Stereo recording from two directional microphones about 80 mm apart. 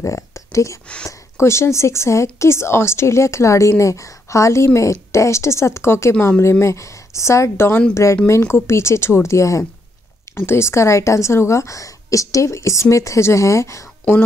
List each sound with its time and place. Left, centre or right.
0.0 s speech: left